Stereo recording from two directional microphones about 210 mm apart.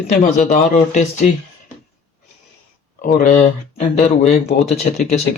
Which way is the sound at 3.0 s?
40° left (ahead or behind).